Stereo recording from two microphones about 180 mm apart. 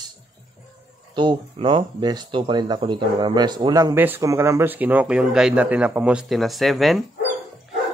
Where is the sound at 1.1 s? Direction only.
25° right (ahead or behind).